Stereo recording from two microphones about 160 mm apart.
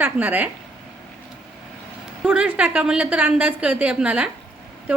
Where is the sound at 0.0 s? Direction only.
10° right (ahead or behind).